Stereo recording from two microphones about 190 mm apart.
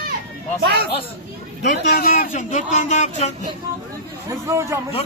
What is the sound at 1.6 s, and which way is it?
A man's voice, 50° left (ahead or behind).